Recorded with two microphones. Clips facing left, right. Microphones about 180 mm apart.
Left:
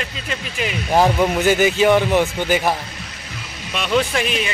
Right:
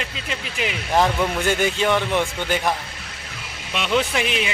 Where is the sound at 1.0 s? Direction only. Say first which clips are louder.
Left 5 dB; 30° left (ahead or behind).